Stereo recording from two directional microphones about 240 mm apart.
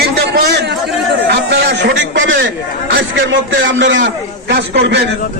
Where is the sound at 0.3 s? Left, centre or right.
Right.